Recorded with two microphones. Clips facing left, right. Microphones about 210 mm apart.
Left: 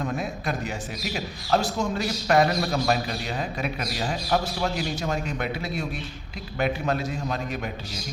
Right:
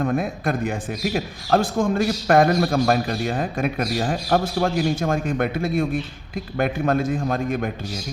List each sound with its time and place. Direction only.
0.0 s a man's voice: 55° right (ahead or behind)